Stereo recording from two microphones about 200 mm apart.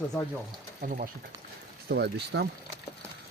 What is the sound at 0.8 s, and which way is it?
Speech, 45° right (ahead or behind).